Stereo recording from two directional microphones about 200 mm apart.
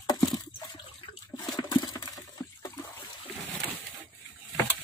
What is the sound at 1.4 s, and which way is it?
Water, 20° left (ahead or behind).